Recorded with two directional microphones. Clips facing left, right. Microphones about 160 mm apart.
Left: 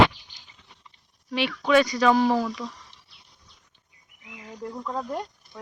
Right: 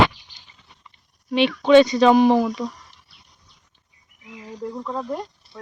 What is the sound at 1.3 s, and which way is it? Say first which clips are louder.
Speech: right 7 dB; 20° right (ahead or behind).